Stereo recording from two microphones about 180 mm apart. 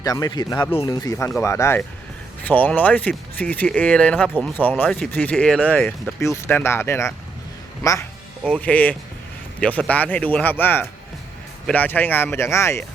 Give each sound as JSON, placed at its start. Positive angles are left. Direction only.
{"t": 0.0, "sound": "speech", "side_deg": 20}
{"t": 8.4, "sound": "speech", "side_deg": 5}